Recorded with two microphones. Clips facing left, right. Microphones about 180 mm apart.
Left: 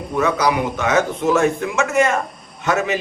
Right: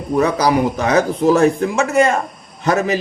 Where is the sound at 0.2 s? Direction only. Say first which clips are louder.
Right 3 dB; 35° right (ahead or behind).